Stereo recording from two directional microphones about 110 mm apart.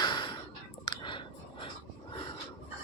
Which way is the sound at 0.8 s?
45° left (ahead or behind).